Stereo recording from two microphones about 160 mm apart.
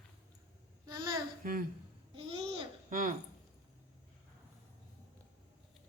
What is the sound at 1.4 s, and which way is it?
Speech, 55° right (ahead or behind).